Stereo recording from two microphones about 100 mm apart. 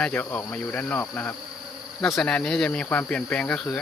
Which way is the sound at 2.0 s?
5° left (ahead or behind).